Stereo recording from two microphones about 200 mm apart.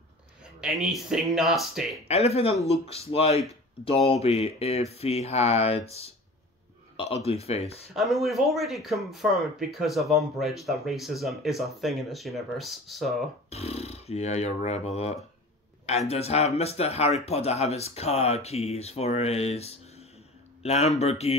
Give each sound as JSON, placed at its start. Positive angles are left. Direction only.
{"t": 0.4, "sound": "speech", "side_deg": -5}
{"t": 2.0, "sound": "speech", "side_deg": 30}
{"t": 7.9, "sound": "speech", "side_deg": 0}
{"t": 13.5, "sound": "speech", "side_deg": 30}